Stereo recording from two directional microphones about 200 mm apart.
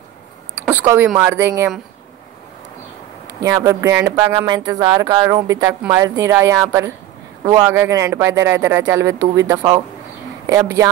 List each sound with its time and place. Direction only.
0.6 s a woman's voice: 10° right (ahead or behind)
3.3 s a woman's voice: 15° right (ahead or behind)